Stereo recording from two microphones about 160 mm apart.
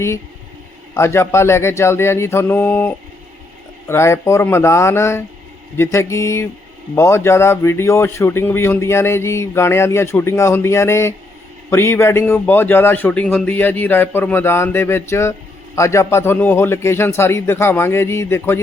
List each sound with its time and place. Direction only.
0.9 s a man's voice: 15° left (ahead or behind)